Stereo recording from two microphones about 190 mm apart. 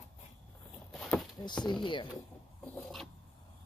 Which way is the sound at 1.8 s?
25° left (ahead or behind).